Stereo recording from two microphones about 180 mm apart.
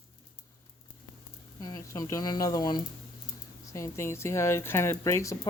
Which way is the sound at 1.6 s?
20° left (ahead or behind).